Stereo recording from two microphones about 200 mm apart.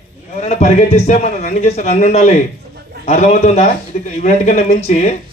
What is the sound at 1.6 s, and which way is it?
A man's voice, 35° left (ahead or behind).